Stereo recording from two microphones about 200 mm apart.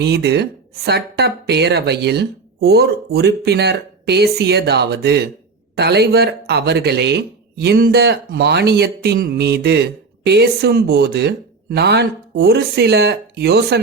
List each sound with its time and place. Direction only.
0.0 s speech: 55° right (ahead or behind)